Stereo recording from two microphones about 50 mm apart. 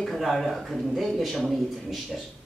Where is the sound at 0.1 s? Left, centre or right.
Centre.